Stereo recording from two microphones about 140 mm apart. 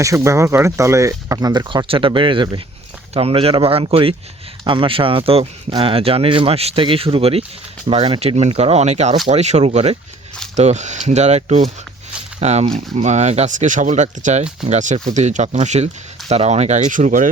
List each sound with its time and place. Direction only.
0.0 s speech: 20° right (ahead or behind); by 17.2 s 70° right (ahead or behind)